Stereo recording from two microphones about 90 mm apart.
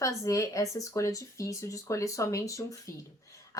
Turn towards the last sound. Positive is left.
turn(degrees=40)  # may be behind; listen again after turning